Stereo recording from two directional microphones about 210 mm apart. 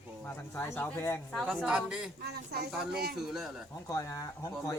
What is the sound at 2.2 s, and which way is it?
Speech, 50° right (ahead or behind).